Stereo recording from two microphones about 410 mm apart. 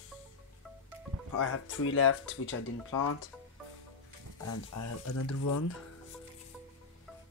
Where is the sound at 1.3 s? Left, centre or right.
Left.